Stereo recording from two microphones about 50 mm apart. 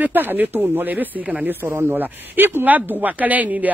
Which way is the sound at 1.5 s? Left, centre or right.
Right.